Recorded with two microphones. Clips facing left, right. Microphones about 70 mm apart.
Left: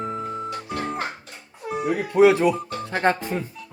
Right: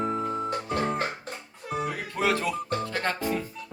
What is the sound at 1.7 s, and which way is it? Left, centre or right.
Music, centre.